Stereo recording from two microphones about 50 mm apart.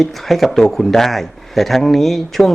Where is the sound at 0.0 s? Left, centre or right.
Centre.